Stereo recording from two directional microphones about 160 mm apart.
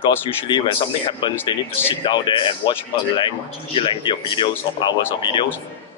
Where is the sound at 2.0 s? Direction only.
30° left (ahead or behind).